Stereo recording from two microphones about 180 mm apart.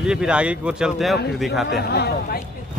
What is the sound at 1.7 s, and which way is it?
Speech, 65° left (ahead or behind).